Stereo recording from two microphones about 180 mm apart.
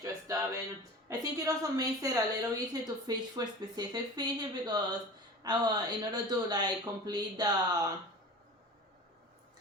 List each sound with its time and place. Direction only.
0.0 s music: 20° right (ahead or behind)
1.2 s a woman's voice: 20° right (ahead or behind)